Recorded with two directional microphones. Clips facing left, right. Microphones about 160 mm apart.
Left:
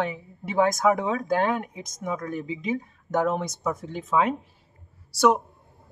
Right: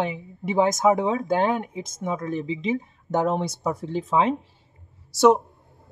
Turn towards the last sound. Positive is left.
turn(degrees=-25)  # may be behind; listen again after turning